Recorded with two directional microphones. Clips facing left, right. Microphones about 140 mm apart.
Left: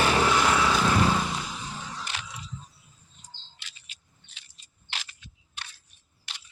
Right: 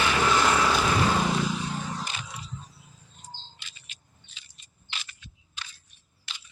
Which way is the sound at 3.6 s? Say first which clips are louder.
Even; 70° left (ahead or behind).